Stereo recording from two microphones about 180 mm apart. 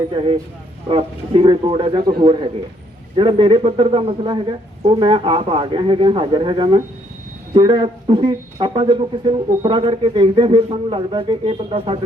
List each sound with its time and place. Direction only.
0.1 s speech: 30° right (ahead or behind)